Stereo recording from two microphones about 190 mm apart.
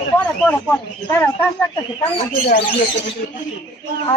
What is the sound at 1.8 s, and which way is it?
Speech, 30° left (ahead or behind).